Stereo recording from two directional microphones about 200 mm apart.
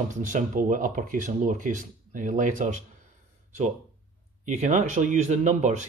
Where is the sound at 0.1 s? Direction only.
40° right (ahead or behind).